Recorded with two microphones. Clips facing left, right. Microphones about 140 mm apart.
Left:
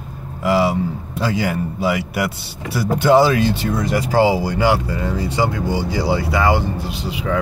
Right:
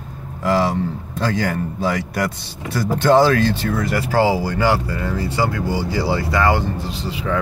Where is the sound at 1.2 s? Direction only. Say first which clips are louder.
Left 1 dB; 10° left (ahead or behind).